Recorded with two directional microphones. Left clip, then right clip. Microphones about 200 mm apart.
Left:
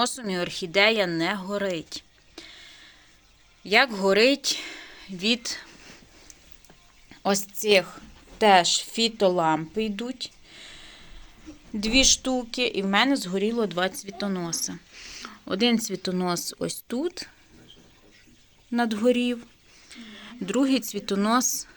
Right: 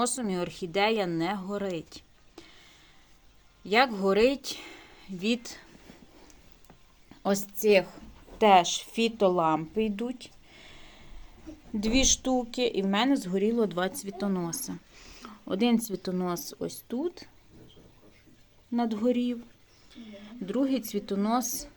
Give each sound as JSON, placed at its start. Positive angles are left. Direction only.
{"t": 0.0, "sound": "speech", "side_deg": -5}
{"t": 7.1, "sound": "a woman's voice", "side_deg": -5}
{"t": 18.7, "sound": "speech", "side_deg": 15}